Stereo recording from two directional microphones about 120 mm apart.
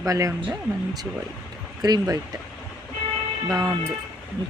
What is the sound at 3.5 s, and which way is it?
Speech, 30° right (ahead or behind).